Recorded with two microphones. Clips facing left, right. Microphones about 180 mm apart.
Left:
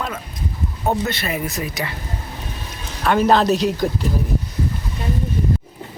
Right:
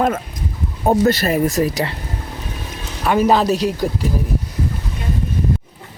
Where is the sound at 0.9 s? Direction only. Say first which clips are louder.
Right 7 dB; 40° right (ahead or behind).